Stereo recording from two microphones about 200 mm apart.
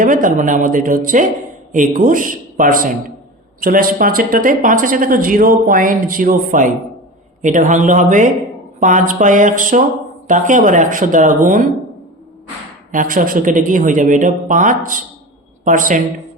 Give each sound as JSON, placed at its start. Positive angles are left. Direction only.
{"t": 0.0, "sound": "speech", "side_deg": -40}
{"t": 12.9, "sound": "speech", "side_deg": -45}